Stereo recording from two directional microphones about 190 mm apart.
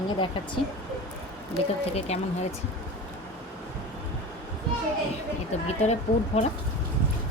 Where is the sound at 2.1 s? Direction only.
35° left (ahead or behind).